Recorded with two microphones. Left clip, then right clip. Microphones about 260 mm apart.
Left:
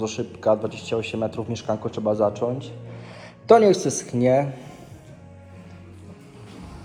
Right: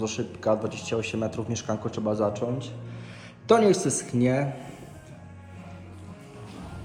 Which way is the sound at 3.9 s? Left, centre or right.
Centre.